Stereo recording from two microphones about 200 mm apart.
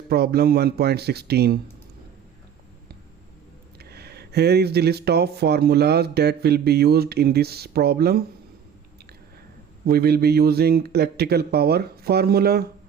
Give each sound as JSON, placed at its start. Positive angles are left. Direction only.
{"t": 0.1, "sound": "speech", "side_deg": -50}
{"t": 3.8, "sound": "speech", "side_deg": -55}
{"t": 9.8, "sound": "speech", "side_deg": -50}